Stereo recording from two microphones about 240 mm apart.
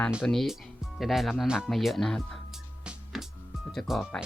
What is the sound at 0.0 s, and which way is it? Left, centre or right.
Music, centre.